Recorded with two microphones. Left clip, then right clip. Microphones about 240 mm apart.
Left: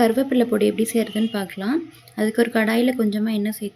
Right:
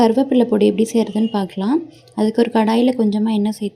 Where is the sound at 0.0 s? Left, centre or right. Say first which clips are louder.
Right 4 dB; right.